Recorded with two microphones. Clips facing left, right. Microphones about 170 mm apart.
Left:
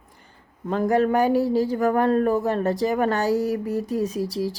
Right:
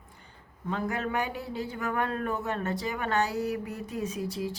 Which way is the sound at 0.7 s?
40° left (ahead or behind).